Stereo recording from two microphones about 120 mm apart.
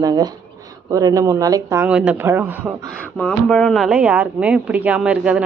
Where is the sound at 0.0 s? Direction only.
30° right (ahead or behind).